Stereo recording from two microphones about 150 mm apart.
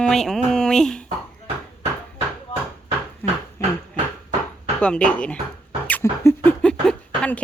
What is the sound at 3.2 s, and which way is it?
Dog, 15° left (ahead or behind).